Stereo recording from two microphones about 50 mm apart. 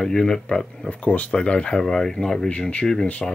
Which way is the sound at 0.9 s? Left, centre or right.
Left.